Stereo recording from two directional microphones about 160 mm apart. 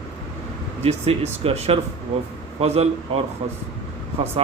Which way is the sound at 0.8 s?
40° right (ahead or behind).